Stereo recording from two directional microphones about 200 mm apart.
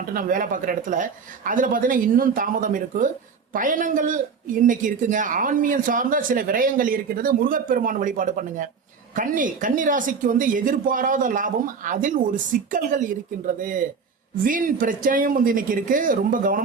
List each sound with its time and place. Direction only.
0.1 s speech: 45° right (ahead or behind)